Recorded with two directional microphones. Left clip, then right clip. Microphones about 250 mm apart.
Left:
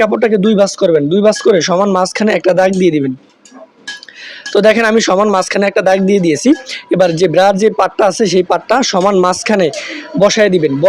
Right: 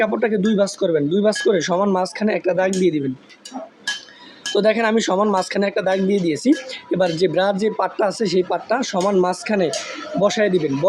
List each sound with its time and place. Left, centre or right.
0.0 s speech: left
4.5 s speech: left